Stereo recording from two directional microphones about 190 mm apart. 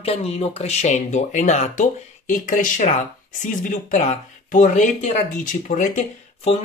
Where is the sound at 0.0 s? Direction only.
30° left (ahead or behind).